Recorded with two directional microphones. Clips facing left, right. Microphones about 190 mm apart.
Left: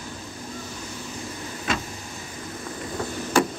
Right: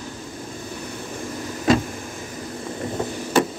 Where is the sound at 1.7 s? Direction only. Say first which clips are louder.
Right 11 dB; 35° right (ahead or behind).